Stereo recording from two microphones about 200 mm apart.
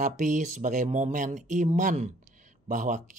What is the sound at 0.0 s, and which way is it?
Speech, 40° right (ahead or behind).